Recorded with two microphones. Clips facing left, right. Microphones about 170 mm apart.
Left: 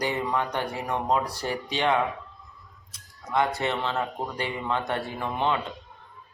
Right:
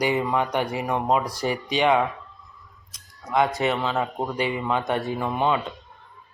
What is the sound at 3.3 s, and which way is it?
Speech, 15° right (ahead or behind).